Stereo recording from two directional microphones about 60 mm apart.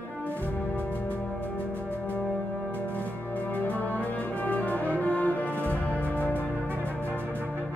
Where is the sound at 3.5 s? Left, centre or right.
Left.